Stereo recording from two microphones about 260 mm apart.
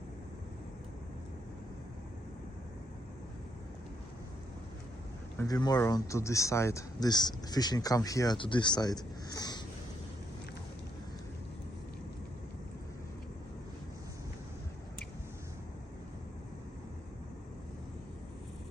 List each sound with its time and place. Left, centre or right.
5.4 s speech: centre